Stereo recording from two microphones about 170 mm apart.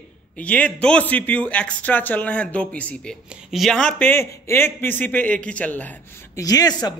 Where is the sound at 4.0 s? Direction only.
15° left (ahead or behind).